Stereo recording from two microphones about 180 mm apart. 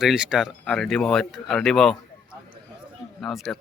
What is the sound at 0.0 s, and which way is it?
Speech, 5° right (ahead or behind).